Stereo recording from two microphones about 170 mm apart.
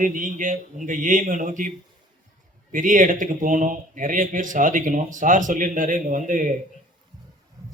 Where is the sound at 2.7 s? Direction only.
50° right (ahead or behind).